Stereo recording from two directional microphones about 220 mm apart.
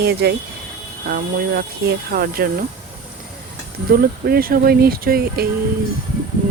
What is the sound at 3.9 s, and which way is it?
Speech, 40° right (ahead or behind).